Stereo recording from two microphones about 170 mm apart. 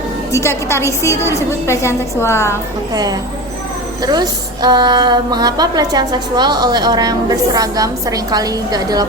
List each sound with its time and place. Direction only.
0.3 s a woman's voice: 15° left (ahead or behind)
2.9 s a woman's voice: 20° right (ahead or behind)